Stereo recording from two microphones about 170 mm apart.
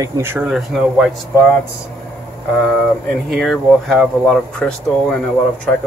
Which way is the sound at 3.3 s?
Centre (ahead or behind).